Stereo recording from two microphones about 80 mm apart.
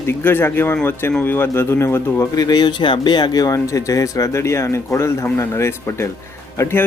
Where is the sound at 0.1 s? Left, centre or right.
Left.